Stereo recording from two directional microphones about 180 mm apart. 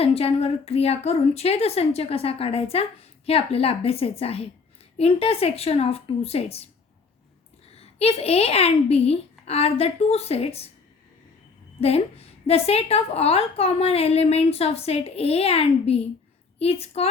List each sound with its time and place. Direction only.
0.0 s a woman's voice: 30° left (ahead or behind)
7.7 s a woman's voice: 35° left (ahead or behind)
11.8 s a woman's voice: 35° left (ahead or behind)